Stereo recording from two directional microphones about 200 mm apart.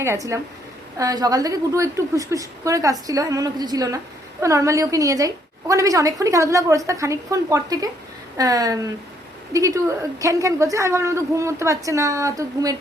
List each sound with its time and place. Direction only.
0.0 s a woman's voice: 15° right (ahead or behind)